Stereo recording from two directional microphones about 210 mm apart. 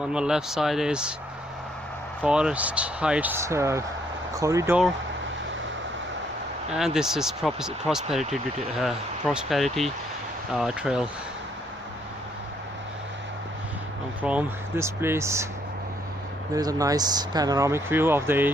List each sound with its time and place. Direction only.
0.0 s speech: 5° right (ahead or behind)
2.2 s speech: 5° right (ahead or behind)
6.7 s speech: centre (ahead or behind)
14.2 s speech: 5° right (ahead or behind)
16.6 s speech: 15° right (ahead or behind)